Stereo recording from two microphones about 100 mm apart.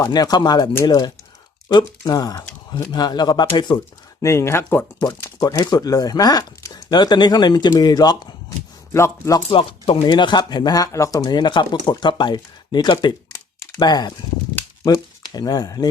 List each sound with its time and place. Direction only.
0.0 s speech: 40° left (ahead or behind)
4.2 s speech: 30° left (ahead or behind)
5.4 s speech: 40° left (ahead or behind)
8.9 s speech: 30° left (ahead or behind)
9.5 s speech: 65° left (ahead or behind); by 15.9 s 40° left (ahead or behind)